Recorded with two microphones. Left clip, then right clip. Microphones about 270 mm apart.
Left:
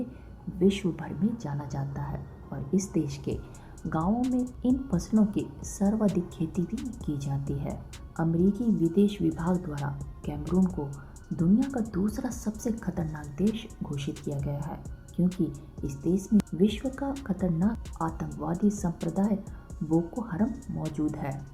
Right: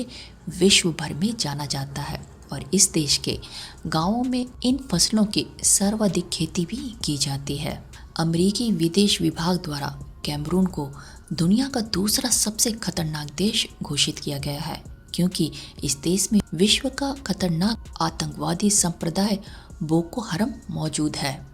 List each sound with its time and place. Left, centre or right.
0.6 s a woman's voice: right